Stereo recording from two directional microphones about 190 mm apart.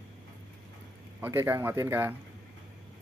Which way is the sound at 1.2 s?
10° right (ahead or behind).